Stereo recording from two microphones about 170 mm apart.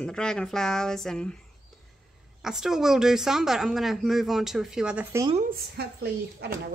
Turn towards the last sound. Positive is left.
turn(degrees=-70)  # may be behind; listen again after turning